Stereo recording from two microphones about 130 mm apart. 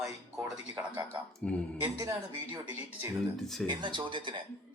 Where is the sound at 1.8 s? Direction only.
25° right (ahead or behind).